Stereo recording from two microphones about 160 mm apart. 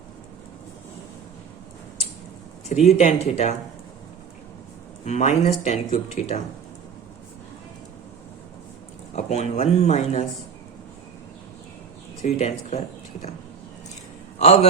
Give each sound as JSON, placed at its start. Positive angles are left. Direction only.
{"t": 2.6, "sound": "speech", "side_deg": 45}
{"t": 5.0, "sound": "speech", "side_deg": 45}
{"t": 9.1, "sound": "speech", "side_deg": 45}
{"t": 12.2, "sound": "speech", "side_deg": 40}
{"t": 14.3, "sound": "a man's voice", "side_deg": 40}